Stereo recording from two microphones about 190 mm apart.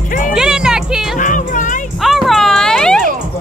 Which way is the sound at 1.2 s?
45° left (ahead or behind).